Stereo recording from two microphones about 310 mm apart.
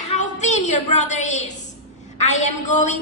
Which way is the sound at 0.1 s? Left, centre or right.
Left.